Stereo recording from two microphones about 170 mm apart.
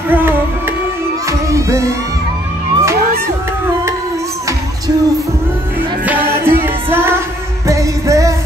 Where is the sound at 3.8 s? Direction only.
20° right (ahead or behind).